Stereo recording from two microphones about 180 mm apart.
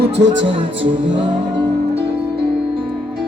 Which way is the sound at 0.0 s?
75° right (ahead or behind).